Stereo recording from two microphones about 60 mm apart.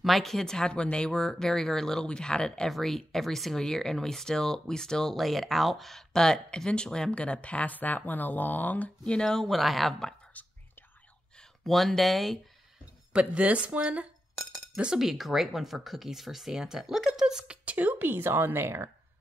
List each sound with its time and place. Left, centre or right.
0.0 s speech: centre
10.3 s whispering: left
11.6 s speech: centre
13.1 s speech: centre
14.8 s speech: centre
17.6 s speech: right